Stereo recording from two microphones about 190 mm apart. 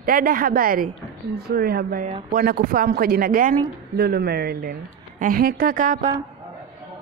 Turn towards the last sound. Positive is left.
turn(degrees=-45)  # may be behind; listen again after turning